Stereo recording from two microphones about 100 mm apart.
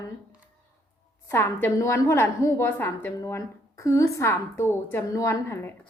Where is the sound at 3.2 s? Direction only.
30° left (ahead or behind).